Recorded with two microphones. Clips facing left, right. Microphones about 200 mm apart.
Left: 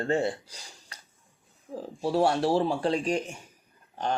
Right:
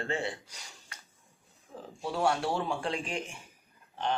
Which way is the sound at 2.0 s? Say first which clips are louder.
Left 5 dB; 35° left (ahead or behind).